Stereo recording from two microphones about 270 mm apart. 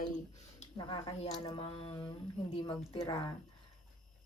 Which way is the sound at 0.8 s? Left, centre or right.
Centre.